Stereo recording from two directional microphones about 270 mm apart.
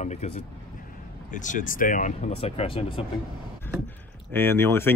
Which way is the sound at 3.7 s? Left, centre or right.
Centre.